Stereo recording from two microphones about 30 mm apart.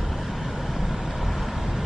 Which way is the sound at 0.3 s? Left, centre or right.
Centre.